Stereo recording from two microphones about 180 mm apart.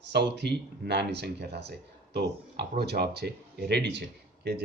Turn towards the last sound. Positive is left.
turn(degrees=-70)  # may be behind; listen again after turning